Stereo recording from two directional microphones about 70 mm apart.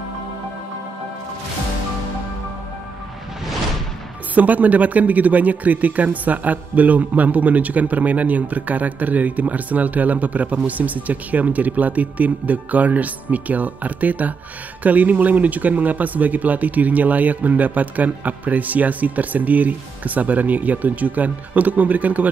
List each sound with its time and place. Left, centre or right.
4.4 s speech: right